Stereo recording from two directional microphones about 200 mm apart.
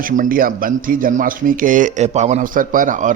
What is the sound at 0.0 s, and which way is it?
Speech, 45° right (ahead or behind).